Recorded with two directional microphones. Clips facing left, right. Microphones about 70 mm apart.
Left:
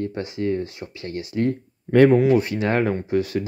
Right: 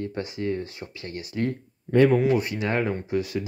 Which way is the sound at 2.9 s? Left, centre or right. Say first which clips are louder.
Left 4 dB; left.